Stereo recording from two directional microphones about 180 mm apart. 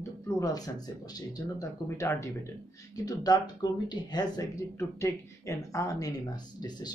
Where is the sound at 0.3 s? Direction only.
20° left (ahead or behind).